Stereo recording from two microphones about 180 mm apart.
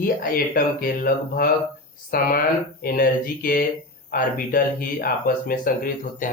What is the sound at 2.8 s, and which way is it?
Speech, 55° left (ahead or behind).